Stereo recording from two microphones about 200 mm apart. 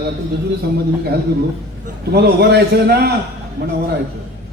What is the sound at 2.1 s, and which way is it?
Speech, 55° right (ahead or behind).